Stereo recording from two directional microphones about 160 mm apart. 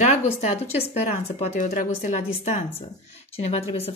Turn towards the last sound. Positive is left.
turn(degrees=40)  # may be behind; listen again after turning